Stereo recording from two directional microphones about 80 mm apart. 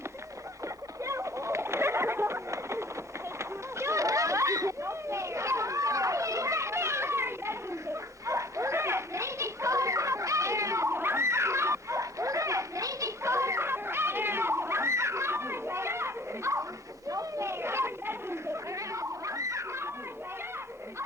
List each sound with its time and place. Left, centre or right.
1.0 s bird: right
3.3 s chatter: right
8.3 s children playing: right
17.1 s a sound: right